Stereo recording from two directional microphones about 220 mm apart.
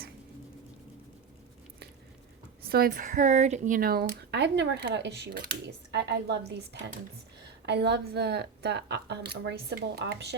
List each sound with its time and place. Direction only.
2.6 s speech: 45° right (ahead or behind)